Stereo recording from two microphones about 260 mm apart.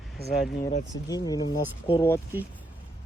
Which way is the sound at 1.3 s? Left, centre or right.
Centre.